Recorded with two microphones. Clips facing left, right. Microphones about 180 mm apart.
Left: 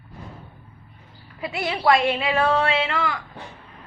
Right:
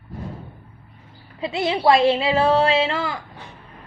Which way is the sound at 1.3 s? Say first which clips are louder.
Right 5 dB; 25° right (ahead or behind).